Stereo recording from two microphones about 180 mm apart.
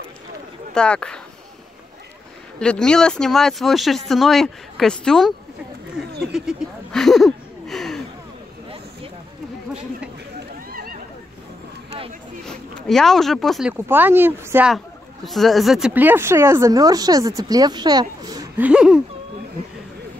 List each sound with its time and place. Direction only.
0.7 s speech: 5° left (ahead or behind)
2.6 s speech: 5° left (ahead or behind)
6.3 s speech: centre (ahead or behind)
10.7 s neigh: 55° right (ahead or behind)
12.4 s speech: 5° left (ahead or behind)
13.7 s speech: 10° right (ahead or behind)
18.6 s speech: 5° right (ahead or behind)